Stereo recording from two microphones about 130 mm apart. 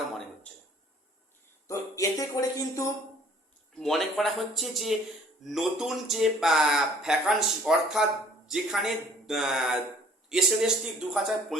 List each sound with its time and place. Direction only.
1.6 s music: 25° left (ahead or behind)
3.8 s a man's voice: centre (ahead or behind)